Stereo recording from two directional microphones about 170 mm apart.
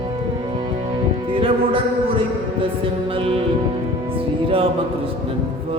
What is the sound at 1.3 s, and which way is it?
Music, 30° right (ahead or behind).